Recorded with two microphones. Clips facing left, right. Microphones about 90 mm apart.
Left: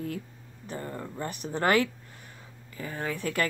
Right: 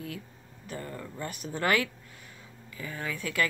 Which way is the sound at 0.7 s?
30° left (ahead or behind).